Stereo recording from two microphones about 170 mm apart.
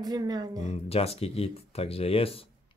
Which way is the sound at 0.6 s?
35° left (ahead or behind).